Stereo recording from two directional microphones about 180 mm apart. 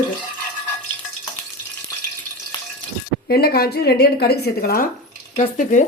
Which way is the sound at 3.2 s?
60° left (ahead or behind).